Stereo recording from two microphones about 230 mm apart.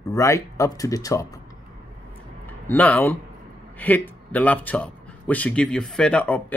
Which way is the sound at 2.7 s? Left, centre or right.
Centre.